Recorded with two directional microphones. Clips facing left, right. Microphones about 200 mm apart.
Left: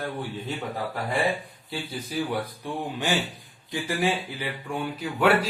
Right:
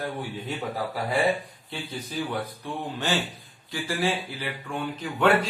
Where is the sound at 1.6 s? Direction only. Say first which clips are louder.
Left 3 dB; 10° left (ahead or behind).